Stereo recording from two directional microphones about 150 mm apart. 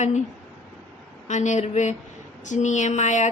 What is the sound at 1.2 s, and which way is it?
A woman's voice, 55° left (ahead or behind).